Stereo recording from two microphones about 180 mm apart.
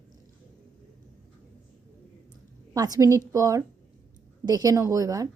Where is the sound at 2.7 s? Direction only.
20° right (ahead or behind).